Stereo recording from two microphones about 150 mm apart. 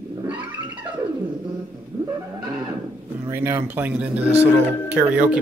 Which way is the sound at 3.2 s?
15° right (ahead or behind).